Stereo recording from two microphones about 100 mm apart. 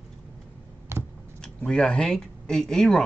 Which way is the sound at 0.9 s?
25° right (ahead or behind).